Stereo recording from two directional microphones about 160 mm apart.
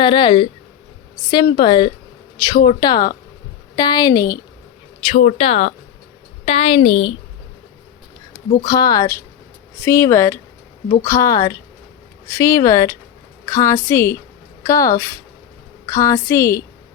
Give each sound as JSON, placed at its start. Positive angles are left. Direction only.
{"t": 0.0, "sound": "speech", "side_deg": 30}
{"t": 5.1, "sound": "a woman's voice", "side_deg": 40}
{"t": 8.6, "sound": "a woman's voice", "side_deg": 25}